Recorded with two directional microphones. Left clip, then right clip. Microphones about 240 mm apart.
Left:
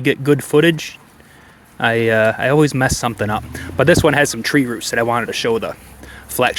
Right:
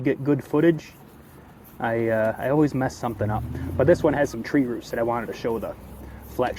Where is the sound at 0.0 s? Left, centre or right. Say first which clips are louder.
Left 8 dB; left.